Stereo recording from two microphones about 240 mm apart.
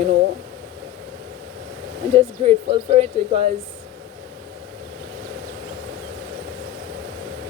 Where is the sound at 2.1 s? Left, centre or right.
Right.